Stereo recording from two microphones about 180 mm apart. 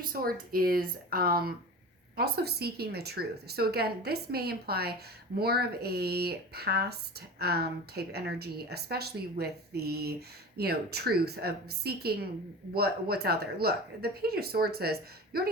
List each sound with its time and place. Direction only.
0.1 s a woman's voice: 55° right (ahead or behind)